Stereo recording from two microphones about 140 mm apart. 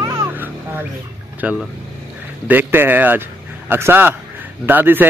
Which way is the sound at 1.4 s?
10° right (ahead or behind).